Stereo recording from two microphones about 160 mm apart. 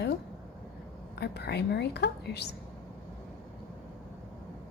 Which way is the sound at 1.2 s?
90° left.